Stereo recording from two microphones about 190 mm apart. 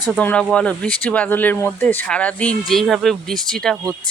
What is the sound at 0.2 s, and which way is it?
Speech, 10° left (ahead or behind).